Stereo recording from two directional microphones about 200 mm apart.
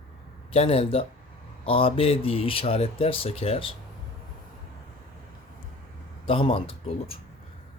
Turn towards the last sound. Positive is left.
turn(degrees=30)  # may be behind; listen again after turning